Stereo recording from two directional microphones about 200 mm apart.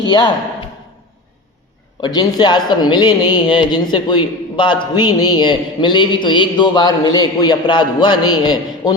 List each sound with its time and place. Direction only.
0.0 s speech: 20° left (ahead or behind)
2.0 s speech: 20° left (ahead or behind)